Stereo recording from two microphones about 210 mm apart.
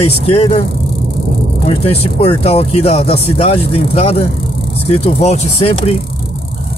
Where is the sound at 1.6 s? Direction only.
30° left (ahead or behind).